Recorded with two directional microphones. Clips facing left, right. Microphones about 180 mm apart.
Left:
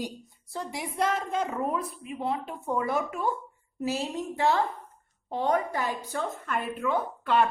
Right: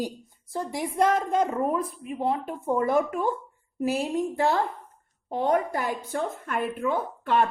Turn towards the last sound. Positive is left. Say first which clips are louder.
# right 1 dB
turn(degrees=-50)  # may be behind; listen again after turning